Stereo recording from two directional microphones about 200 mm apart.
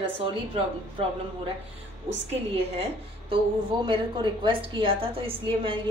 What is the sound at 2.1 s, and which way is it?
A woman's voice, 30° right (ahead or behind).